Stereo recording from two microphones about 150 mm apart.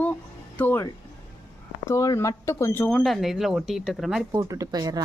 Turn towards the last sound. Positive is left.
turn(degrees=-25)  # may be behind; listen again after turning